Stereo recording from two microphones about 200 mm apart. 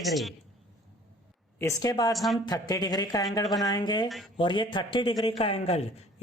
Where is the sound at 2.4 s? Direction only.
20° left (ahead or behind).